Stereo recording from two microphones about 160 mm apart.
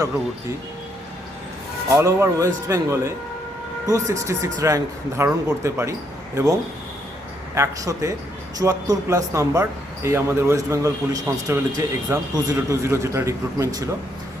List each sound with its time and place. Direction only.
2.0 s speech: 15° right (ahead or behind)
7.5 s speech: 20° right (ahead or behind)